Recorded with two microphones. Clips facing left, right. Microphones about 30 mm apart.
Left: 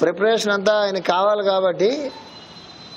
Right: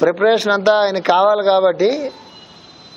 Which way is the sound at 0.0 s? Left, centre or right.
Centre.